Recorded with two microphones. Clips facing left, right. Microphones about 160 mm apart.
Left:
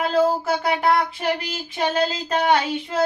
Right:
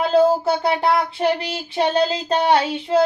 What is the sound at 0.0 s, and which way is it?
Female singing, 30° right (ahead or behind).